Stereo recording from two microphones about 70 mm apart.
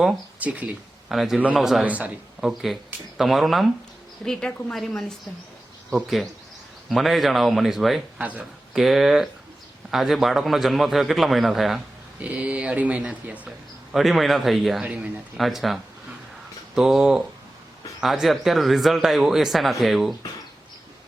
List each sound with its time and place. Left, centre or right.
0.3 s speech: right
1.1 s speech: centre
1.8 s speech: centre
2.4 s speech: centre
6.9 s speech: centre
12.2 s speech: centre
13.9 s speech: centre